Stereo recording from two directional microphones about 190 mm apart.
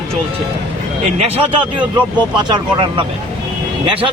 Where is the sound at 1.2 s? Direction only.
25° right (ahead or behind).